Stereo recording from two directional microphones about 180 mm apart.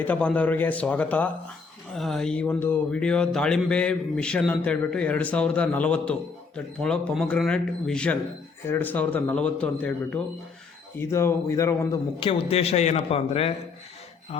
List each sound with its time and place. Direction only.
0.0 s a man's voice: 5° left (ahead or behind)
12.2 s a man's voice: 30° left (ahead or behind)